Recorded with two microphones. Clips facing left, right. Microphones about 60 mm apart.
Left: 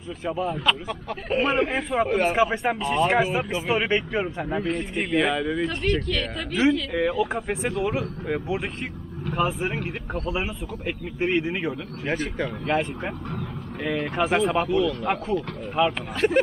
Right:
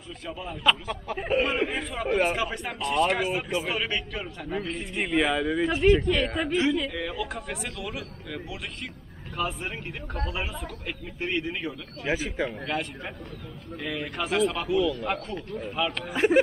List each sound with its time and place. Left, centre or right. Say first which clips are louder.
0.7 s speech: even; centre
2.0 s speech: right 3 dB; centre
2.3 s speech: left 8 dB; centre
4.7 s speech: right 1 dB; centre
6.0 s a woman's voice: right 3 dB; centre
6.9 s speech: left 8 dB; centre
9.4 s speech: left 5 dB; centre
12.1 s speech: left 1 dB; centre
12.6 s speech: left 6 dB; left
14.7 s speech: left 2 dB; centre
15.8 s speech: left 7 dB; centre
16.2 s speech: even; centre